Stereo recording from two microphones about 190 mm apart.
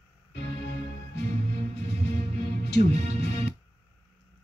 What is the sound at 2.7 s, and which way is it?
Speech, 60° left (ahead or behind).